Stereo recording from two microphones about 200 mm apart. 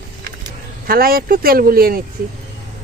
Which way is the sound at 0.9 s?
50° right (ahead or behind).